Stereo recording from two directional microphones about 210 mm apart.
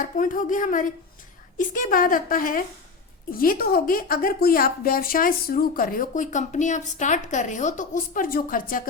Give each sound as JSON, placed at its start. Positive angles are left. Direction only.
{"t": 0.0, "sound": "a woman's voice", "side_deg": 40}